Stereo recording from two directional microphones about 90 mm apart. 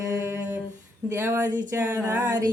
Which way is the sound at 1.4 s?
20° right (ahead or behind).